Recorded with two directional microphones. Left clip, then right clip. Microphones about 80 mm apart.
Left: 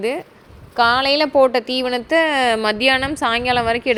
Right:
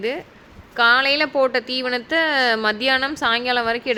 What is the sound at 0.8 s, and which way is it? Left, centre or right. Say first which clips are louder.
A woman's voice: left 1 dB; left.